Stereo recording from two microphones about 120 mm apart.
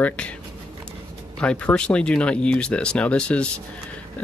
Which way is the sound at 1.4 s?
10° left (ahead or behind).